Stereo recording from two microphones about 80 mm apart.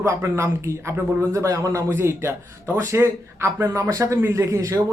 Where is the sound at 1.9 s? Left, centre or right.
Right.